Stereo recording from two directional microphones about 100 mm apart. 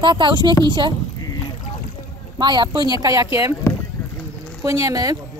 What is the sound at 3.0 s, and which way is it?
Speech, 35° right (ahead or behind).